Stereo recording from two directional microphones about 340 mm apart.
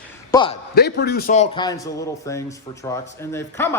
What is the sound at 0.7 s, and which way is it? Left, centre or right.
A man's voice, left.